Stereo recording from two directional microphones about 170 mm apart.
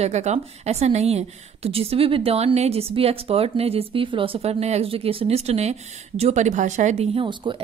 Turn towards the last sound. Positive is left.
turn(degrees=-30)  # may be behind; listen again after turning